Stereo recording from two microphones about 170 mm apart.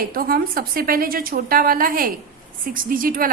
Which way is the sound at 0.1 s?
60° right (ahead or behind).